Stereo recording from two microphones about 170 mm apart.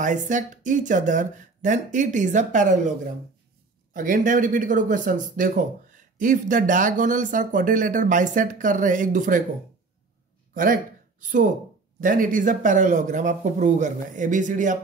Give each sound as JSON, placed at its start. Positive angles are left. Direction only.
{"t": 0.0, "sound": "speech", "side_deg": -50}
{"t": 3.9, "sound": "speech", "side_deg": -55}
{"t": 10.5, "sound": "a sound", "side_deg": -55}
{"t": 12.0, "sound": "speech", "side_deg": -55}